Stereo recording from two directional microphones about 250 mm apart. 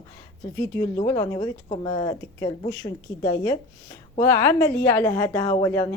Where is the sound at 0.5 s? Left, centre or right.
Centre.